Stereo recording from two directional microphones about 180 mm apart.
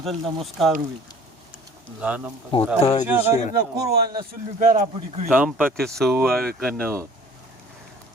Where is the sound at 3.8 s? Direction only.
60° right (ahead or behind).